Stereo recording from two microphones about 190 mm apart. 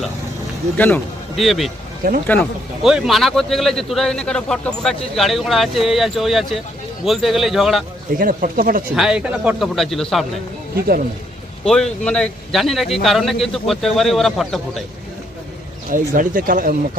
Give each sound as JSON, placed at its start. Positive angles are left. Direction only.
{"t": 0.8, "sound": "a man's voice", "side_deg": 10}
{"t": 8.2, "sound": "speech", "side_deg": -45}
{"t": 9.0, "sound": "a man's voice", "side_deg": -5}
{"t": 11.6, "sound": "a man's voice", "side_deg": 5}
{"t": 15.9, "sound": "speech", "side_deg": -45}